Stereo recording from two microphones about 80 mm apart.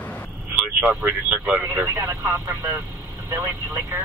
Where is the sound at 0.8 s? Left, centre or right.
Centre.